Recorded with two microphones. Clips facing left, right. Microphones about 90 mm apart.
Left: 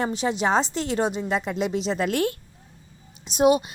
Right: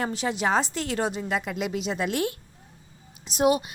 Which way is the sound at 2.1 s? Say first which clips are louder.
Left 3 dB; 50° left (ahead or behind).